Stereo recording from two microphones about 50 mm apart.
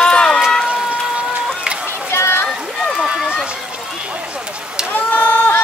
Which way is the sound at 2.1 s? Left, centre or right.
Left.